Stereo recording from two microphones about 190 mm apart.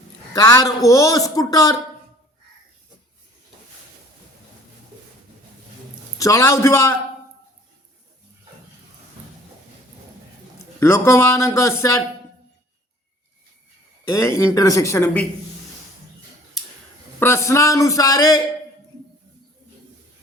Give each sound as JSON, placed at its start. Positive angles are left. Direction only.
{"t": 0.3, "sound": "speech", "side_deg": 20}
{"t": 6.1, "sound": "speech", "side_deg": 15}
{"t": 10.8, "sound": "speech", "side_deg": 15}
{"t": 14.1, "sound": "speech", "side_deg": 15}
{"t": 16.6, "sound": "a sound", "side_deg": 0}
{"t": 17.2, "sound": "speech", "side_deg": 15}